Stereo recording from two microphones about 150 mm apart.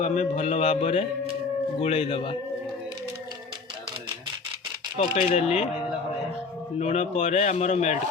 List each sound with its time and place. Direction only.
0.0 s speech: 50° left (ahead or behind)
5.0 s speech: 40° left (ahead or behind)
6.7 s speech: 45° left (ahead or behind)